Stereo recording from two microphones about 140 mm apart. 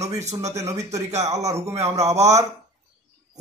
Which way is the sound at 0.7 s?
25° right (ahead or behind).